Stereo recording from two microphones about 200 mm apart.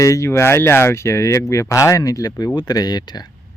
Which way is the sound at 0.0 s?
15° left (ahead or behind).